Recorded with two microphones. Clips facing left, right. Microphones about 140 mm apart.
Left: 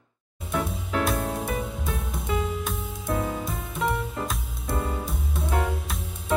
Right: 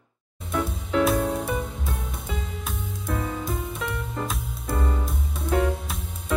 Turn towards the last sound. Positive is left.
turn(degrees=0)  # may be behind; listen again after turning